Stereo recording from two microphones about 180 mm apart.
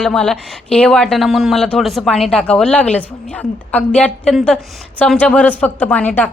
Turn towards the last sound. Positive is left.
turn(degrees=10)  # may be behind; listen again after turning